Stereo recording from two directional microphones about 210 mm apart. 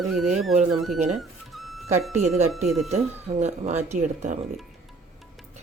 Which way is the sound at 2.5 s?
Centre (ahead or behind).